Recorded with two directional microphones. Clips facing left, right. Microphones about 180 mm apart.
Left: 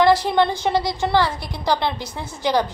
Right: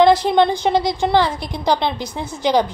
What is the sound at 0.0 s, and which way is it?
A woman's voice, 20° right (ahead or behind).